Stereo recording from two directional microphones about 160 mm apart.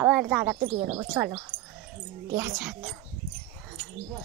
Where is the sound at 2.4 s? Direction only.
5° right (ahead or behind).